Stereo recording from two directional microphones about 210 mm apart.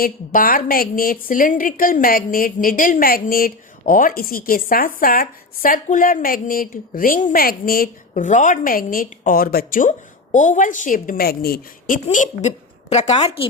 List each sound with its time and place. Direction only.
0.0 s a woman's voice: 45° left (ahead or behind)
12.0 s a woman's voice: 35° left (ahead or behind)